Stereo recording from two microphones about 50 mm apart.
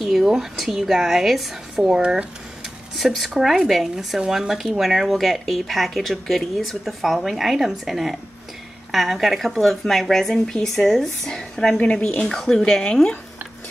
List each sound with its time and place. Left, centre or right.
0.0 s speech: centre
2.0 s speech: right
3.0 s a woman's voice: centre